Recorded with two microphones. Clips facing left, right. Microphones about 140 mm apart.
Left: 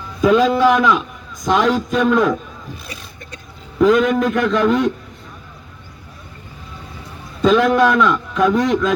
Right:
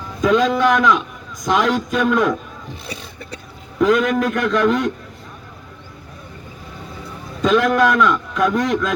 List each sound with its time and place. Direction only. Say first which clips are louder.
0.2 s a man's voice: left 2 dB; 5° left (ahead or behind)
3.8 s a man's voice: left 2 dB; centre (ahead or behind)
7.4 s a man's voice: left 2 dB; centre (ahead or behind)